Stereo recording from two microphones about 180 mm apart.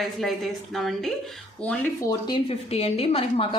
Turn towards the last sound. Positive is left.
turn(degrees=30)  # may be behind; listen again after turning